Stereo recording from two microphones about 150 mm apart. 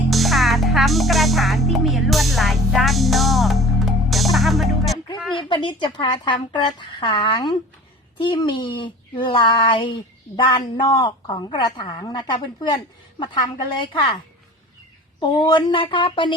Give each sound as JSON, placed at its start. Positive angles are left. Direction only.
{"t": 0.1, "sound": "music", "side_deg": 0}
{"t": 5.4, "sound": "speech", "side_deg": 30}
{"t": 15.2, "sound": "speech", "side_deg": 30}